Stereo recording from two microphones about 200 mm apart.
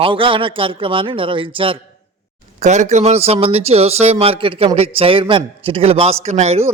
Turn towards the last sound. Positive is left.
turn(degrees=-35)  # may be behind; listen again after turning